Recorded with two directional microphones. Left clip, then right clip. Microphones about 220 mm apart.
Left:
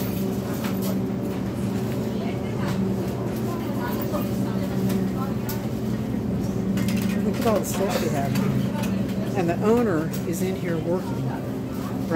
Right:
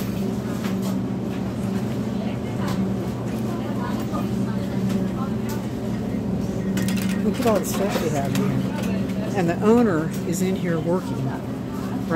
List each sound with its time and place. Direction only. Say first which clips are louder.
9.4 s speech: right 3 dB; 15° right (ahead or behind)